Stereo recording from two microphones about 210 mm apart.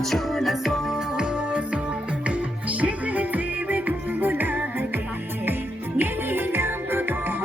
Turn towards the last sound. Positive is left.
turn(degrees=-10)  # may be behind; listen again after turning